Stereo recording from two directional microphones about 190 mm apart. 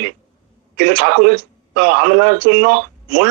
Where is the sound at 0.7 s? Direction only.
55° right (ahead or behind).